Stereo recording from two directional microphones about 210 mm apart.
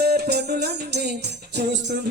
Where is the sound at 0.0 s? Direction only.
50° right (ahead or behind).